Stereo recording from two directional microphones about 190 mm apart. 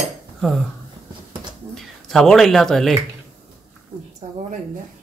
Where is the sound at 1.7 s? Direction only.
Centre (ahead or behind).